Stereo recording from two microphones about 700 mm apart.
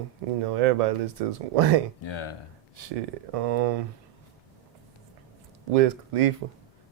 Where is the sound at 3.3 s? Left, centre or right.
Right.